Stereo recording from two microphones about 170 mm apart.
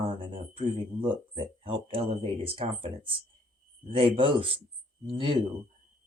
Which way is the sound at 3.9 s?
30° right (ahead or behind).